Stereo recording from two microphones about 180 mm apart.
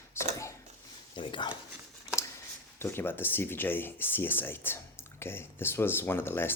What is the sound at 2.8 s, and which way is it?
Speech, 15° left (ahead or behind).